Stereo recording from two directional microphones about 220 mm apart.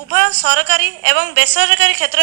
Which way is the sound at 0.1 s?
50° right (ahead or behind).